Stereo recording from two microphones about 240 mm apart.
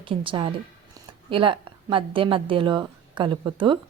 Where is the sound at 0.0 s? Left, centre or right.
Right.